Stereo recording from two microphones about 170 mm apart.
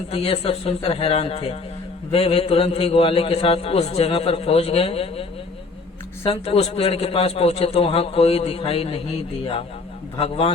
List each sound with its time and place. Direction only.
0.1 s a man's voice: 35° left (ahead or behind)
6.2 s a man's voice: 35° left (ahead or behind)
10.2 s a man's voice: 35° left (ahead or behind)